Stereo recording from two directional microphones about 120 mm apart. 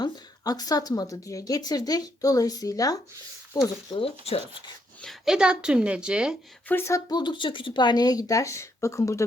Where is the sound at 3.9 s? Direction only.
50° left (ahead or behind).